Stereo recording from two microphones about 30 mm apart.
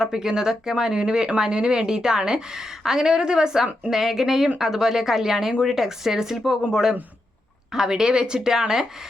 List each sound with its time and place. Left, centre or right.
0.0 s a woman's voice: right